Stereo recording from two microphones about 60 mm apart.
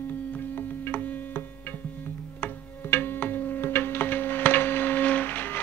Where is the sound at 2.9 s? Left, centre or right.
Left.